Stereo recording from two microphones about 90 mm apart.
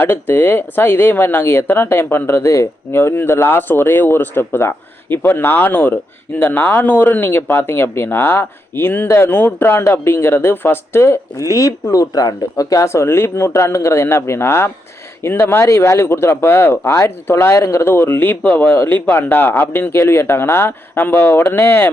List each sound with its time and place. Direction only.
0.0 s speech: 25° left (ahead or behind)